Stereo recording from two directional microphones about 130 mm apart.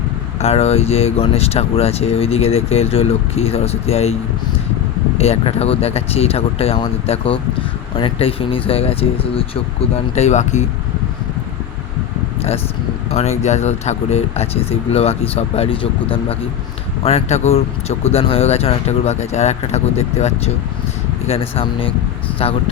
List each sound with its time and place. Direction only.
0.3 s speech: 55° left (ahead or behind)
5.1 s speech: 50° left (ahead or behind)
10.2 s speech: 60° left (ahead or behind)
13.1 s speech: 55° left (ahead or behind)